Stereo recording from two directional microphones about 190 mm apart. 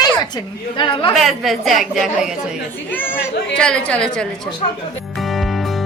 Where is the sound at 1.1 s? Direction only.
Centre (ahead or behind).